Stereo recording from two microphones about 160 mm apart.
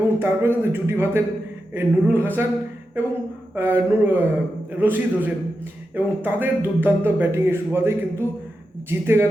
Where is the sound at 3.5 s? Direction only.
15° right (ahead or behind).